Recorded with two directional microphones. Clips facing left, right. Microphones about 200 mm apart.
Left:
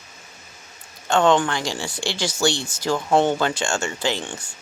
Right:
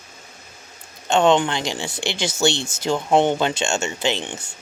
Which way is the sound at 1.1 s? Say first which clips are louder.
Right 1 dB; 20° right (ahead or behind).